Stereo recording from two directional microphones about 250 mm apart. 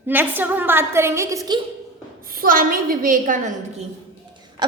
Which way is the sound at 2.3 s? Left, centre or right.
Right.